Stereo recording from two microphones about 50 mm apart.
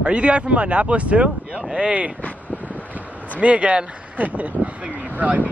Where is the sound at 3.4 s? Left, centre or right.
Right.